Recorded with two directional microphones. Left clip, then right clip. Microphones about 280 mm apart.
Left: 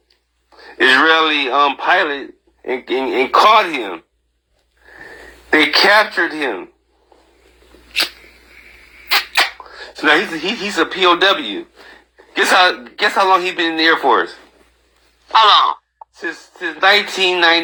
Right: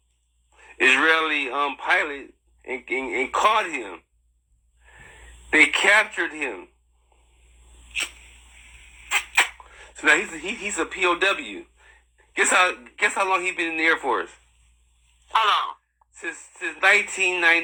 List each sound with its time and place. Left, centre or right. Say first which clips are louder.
0.5 s speech: left 7 dB; left
5.5 s speech: left 6 dB; left
9.0 s speech: left 7 dB; left
15.3 s speech: left 11 dB; centre
16.1 s speech: left 7 dB; left